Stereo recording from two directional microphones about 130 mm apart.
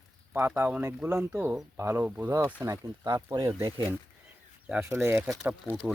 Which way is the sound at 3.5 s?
15° right (ahead or behind).